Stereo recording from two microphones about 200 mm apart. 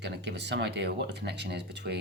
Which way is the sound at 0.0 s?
55° right (ahead or behind).